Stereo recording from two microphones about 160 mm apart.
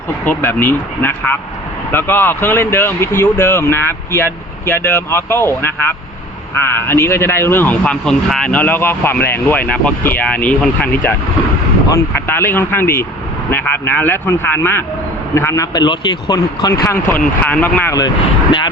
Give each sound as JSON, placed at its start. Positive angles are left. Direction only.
{"t": 0.3, "sound": "speech", "side_deg": 15}